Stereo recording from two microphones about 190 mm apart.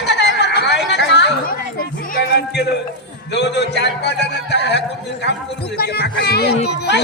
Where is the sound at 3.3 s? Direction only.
65° left (ahead or behind).